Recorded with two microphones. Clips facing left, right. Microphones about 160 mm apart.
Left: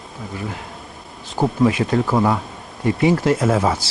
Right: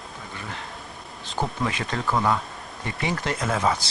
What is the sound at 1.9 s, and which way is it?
Speech, 25° left (ahead or behind).